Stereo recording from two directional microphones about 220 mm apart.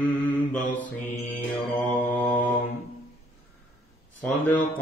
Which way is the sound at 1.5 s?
10° left (ahead or behind).